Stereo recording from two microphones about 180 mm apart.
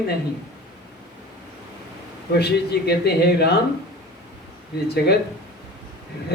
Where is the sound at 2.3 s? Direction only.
65° left (ahead or behind).